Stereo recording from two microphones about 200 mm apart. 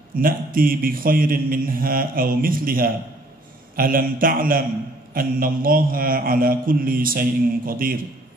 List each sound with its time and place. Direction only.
0.2 s a man's voice: 45° right (ahead or behind)